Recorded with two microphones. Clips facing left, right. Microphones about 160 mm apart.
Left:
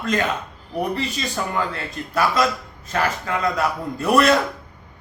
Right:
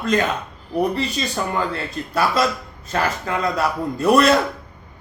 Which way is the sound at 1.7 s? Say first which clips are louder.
Right 3 dB; 35° right (ahead or behind).